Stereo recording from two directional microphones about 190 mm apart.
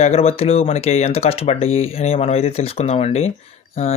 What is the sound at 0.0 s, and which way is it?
Speech, 35° left (ahead or behind).